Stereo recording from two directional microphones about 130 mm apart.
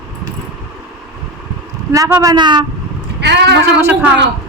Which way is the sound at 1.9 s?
25° right (ahead or behind).